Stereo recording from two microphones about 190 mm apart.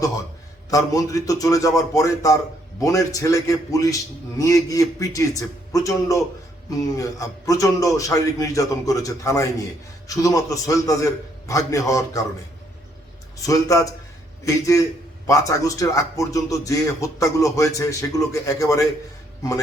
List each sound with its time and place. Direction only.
0.7 s speech: 20° left (ahead or behind)
13.4 s speech: 15° left (ahead or behind)
15.3 s speech: 15° left (ahead or behind)